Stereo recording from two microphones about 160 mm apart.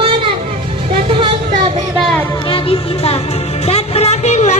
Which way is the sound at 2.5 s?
40° left (ahead or behind).